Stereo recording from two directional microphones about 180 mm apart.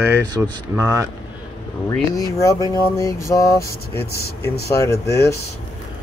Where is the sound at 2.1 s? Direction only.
20° left (ahead or behind).